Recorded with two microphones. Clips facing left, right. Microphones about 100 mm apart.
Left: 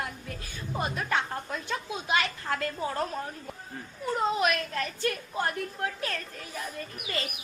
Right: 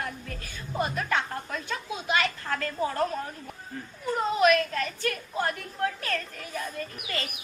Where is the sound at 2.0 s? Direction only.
20° left (ahead or behind).